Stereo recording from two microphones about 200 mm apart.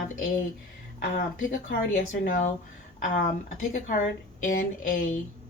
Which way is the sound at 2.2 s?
45° left (ahead or behind).